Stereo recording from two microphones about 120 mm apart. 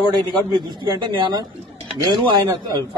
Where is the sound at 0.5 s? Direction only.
35° right (ahead or behind).